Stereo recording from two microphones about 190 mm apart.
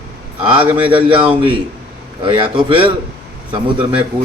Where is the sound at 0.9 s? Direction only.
25° right (ahead or behind).